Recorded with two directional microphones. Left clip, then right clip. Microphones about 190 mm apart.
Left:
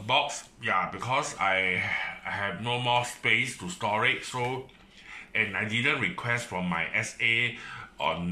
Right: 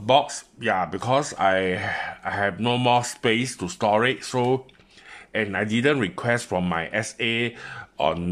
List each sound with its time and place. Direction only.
0.0 s speech: 50° right (ahead or behind)